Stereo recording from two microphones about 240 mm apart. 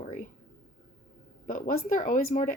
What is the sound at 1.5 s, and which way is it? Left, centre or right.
Speech, left.